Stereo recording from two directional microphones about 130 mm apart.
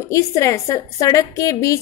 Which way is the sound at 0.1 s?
25° left (ahead or behind).